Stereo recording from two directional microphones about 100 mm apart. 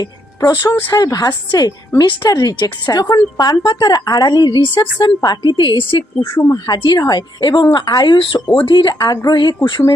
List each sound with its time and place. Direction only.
0.0 s a woman's voice: 40° left (ahead or behind); by 6.4 s 55° left (ahead or behind)
6.4 s a woman's voice: 40° left (ahead or behind)